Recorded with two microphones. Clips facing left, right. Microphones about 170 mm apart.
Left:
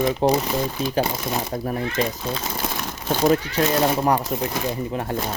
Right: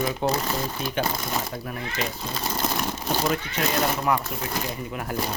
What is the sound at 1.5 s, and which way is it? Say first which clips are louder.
Speech: left 8 dB; 40° left (ahead or behind).